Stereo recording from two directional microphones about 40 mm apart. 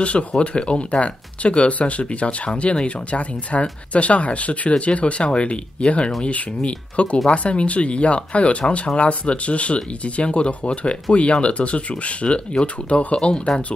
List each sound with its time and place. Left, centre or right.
0.0 s speech: left